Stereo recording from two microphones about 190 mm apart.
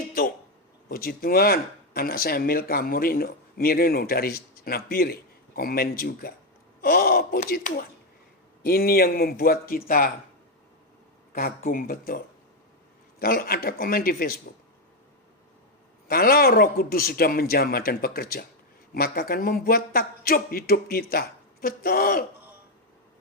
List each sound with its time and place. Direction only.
0.9 s speech: 50° left (ahead or behind)
11.3 s speech: 50° left (ahead or behind)
16.0 s speech: 50° left (ahead or behind)